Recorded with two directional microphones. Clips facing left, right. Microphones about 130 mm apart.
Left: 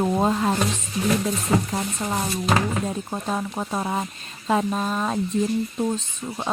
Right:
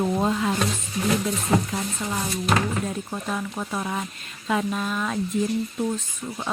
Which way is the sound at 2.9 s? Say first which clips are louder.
Left 2 dB; 25° left (ahead or behind).